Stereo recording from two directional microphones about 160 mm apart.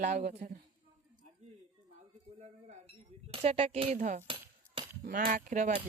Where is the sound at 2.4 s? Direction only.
40° right (ahead or behind).